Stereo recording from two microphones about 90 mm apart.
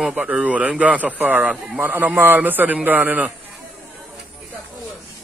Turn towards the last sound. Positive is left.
turn(degrees=-20)  # may be behind; listen again after turning